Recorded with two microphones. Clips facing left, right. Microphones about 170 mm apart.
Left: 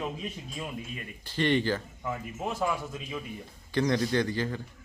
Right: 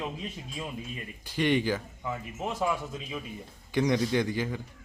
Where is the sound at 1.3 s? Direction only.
10° right (ahead or behind).